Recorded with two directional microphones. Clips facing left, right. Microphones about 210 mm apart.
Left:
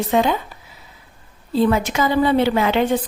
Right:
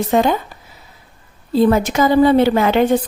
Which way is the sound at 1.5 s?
40° right (ahead or behind).